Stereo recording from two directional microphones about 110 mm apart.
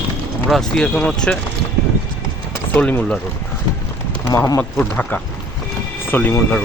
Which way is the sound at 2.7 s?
15° left (ahead or behind).